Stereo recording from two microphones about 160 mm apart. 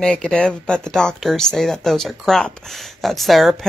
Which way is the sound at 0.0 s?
5° left (ahead or behind).